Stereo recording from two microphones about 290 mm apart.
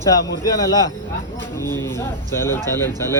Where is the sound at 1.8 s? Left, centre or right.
Centre.